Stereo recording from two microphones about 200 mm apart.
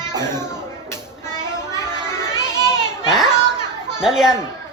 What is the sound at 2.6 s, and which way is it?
Children playing, 20° right (ahead or behind).